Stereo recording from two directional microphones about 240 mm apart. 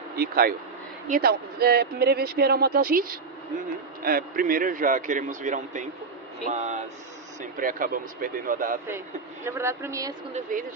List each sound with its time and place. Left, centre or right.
0.1 s speech: right
8.8 s speech: centre
10.5 s speech: right